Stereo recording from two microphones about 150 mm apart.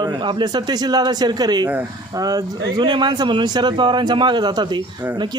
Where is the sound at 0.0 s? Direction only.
30° right (ahead or behind).